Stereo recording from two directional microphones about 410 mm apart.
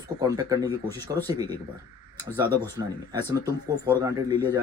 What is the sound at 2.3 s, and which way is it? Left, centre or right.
Speech, centre.